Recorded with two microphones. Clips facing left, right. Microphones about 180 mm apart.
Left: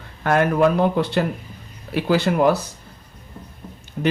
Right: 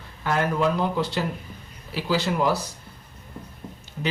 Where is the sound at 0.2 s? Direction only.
60° left (ahead or behind).